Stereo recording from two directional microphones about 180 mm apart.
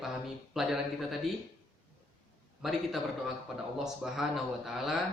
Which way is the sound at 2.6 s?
Centre (ahead or behind).